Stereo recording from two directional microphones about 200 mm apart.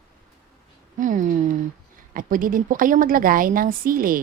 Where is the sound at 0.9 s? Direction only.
40° right (ahead or behind).